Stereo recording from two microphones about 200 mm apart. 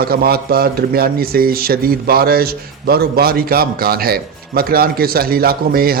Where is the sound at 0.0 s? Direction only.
50° right (ahead or behind).